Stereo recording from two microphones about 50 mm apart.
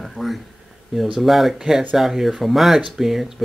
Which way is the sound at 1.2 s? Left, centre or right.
Centre.